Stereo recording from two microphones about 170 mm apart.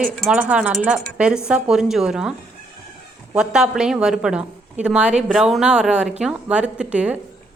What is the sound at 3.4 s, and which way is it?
A woman's voice, 5° right (ahead or behind).